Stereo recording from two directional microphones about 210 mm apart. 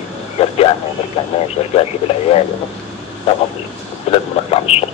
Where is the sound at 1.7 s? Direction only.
30° left (ahead or behind).